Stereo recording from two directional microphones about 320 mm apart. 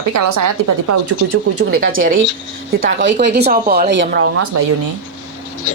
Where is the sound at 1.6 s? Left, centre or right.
Right.